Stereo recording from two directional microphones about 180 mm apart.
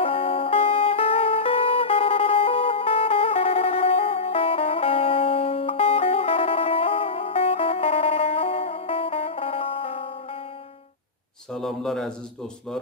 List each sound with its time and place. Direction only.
0.0 s music: 30° left (ahead or behind)
11.5 s speech: centre (ahead or behind)